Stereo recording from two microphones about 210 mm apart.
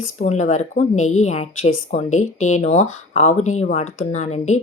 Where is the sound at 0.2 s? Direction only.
35° left (ahead or behind).